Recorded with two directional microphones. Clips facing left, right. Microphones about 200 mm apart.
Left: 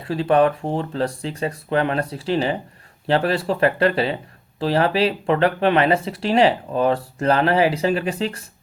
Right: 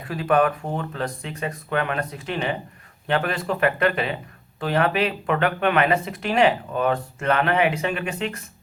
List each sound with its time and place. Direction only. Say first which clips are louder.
0.0 s speech: left 3 dB; 30° left (ahead or behind)